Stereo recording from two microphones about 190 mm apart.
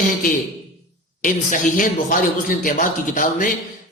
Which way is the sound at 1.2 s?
45° left (ahead or behind).